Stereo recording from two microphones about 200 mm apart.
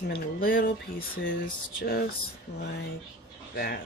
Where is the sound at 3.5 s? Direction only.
50° left (ahead or behind).